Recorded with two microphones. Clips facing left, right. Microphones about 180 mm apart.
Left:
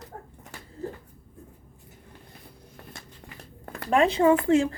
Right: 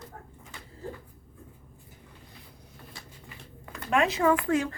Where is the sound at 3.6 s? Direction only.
55° left (ahead or behind).